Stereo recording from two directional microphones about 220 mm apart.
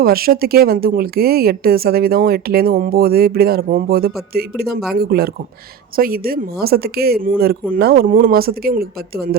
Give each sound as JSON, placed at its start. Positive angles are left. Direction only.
{"t": 0.0, "sound": "speech", "side_deg": -45}